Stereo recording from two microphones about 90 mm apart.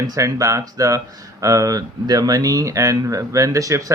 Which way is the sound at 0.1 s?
40° right (ahead or behind).